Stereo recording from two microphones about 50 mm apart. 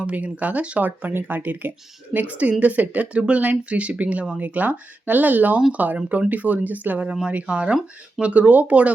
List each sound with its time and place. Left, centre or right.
0.0 s speech: right
2.1 s speech: right